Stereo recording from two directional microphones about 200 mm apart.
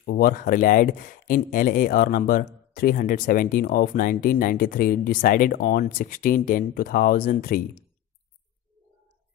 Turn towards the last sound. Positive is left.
turn(degrees=45)  # may be behind; listen again after turning